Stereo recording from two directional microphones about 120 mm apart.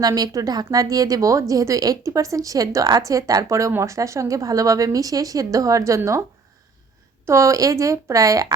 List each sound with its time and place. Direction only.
0.0 s a woman's voice: 30° right (ahead or behind)
7.3 s a woman's voice: 25° right (ahead or behind)